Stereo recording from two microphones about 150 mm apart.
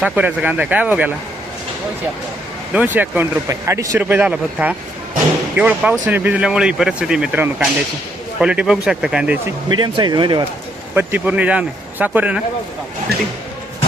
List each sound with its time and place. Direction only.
0.0 s speech: 10° right (ahead or behind)
2.7 s speech: 10° right (ahead or behind)
9.6 s speech: 30° right (ahead or behind)
10.9 s speech: 10° right (ahead or behind)
13.1 s speech: 90° right